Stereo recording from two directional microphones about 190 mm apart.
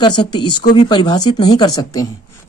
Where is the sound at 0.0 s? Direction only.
25° left (ahead or behind).